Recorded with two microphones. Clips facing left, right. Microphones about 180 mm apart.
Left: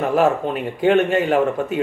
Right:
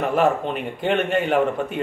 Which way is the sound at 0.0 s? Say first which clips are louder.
Left 2 dB; centre (ahead or behind).